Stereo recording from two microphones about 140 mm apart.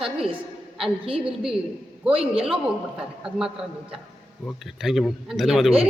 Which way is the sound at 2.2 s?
45° right (ahead or behind).